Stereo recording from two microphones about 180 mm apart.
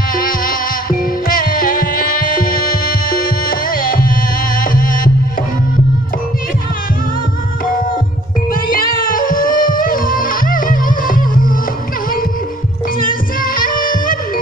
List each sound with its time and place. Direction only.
0.1 s music: 50° left (ahead or behind)
8.6 s music: 50° left (ahead or behind)
13.0 s music: 50° left (ahead or behind)